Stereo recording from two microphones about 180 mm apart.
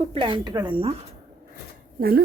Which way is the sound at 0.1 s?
25° right (ahead or behind).